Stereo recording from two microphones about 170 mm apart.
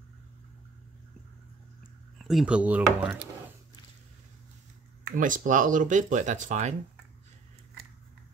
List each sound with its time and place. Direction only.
2.1 s speech: centre (ahead or behind)
5.0 s speech: 50° right (ahead or behind)